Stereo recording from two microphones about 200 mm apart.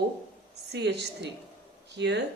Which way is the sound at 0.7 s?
60° right (ahead or behind).